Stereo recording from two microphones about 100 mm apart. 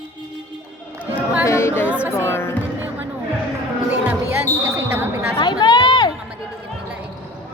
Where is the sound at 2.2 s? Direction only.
25° left (ahead or behind).